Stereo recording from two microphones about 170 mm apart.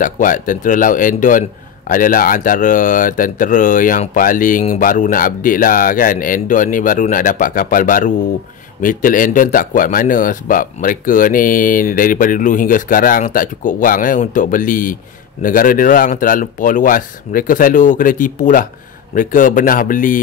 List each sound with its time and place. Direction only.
0.0 s a man's voice: 50° left (ahead or behind)